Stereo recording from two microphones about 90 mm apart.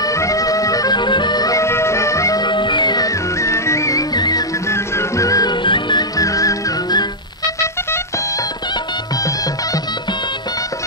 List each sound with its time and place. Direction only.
0.0 s music: 35° left (ahead or behind)
1.6 s music: 30° left (ahead or behind)
2.4 s music: 60° left (ahead or behind)
3.1 s music: 35° left (ahead or behind)
4.1 s music: 50° left (ahead or behind)
4.6 s music: 30° left (ahead or behind)
5.5 s music: 60° left (ahead or behind)
6.1 s music: 40° left (ahead or behind)